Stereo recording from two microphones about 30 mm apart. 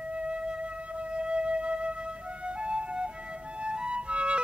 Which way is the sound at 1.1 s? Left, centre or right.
Right.